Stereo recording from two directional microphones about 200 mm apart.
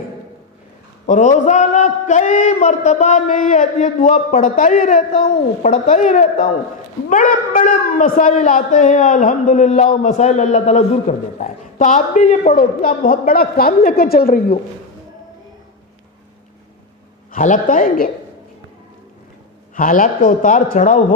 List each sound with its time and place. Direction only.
1.0 s a man's voice: 40° left (ahead or behind)
17.3 s a woman's voice: 40° left (ahead or behind)
19.7 s a man's voice: 40° left (ahead or behind)